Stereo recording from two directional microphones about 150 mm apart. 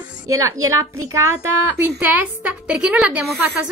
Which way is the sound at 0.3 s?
20° right (ahead or behind).